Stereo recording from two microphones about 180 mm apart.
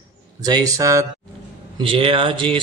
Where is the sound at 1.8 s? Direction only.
30° right (ahead or behind).